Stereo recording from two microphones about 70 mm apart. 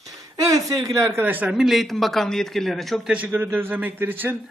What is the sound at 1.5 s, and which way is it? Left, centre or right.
Speech, centre.